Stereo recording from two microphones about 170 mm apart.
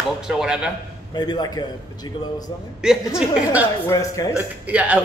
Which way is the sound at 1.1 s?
25° left (ahead or behind).